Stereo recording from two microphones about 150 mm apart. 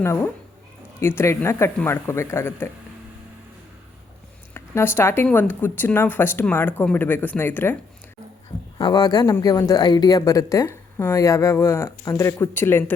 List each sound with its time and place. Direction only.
0.0 s speech: 20° left (ahead or behind)
4.5 s speech: 15° left (ahead or behind)
8.8 s speech: 30° left (ahead or behind)